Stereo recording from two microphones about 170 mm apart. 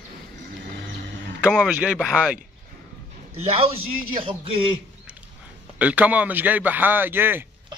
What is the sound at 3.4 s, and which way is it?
A man's voice, 35° right (ahead or behind).